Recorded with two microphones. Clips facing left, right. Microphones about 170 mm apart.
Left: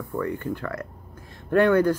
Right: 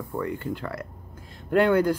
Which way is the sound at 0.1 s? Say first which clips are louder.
Left 2 dB; 15° right (ahead or behind).